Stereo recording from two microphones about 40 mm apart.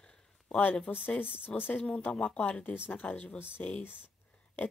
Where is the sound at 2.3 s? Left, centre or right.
Left.